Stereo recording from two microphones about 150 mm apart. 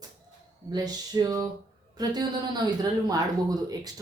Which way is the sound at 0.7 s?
25° right (ahead or behind).